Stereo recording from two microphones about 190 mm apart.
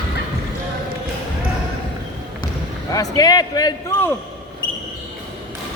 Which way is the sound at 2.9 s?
20° left (ahead or behind).